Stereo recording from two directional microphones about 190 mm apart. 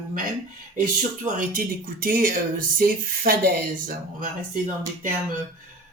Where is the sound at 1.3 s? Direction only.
45° right (ahead or behind).